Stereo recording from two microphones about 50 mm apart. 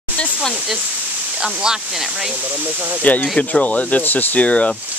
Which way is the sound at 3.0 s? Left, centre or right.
Left.